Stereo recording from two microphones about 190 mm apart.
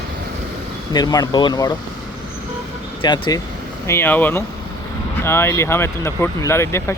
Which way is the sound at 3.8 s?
10° left (ahead or behind).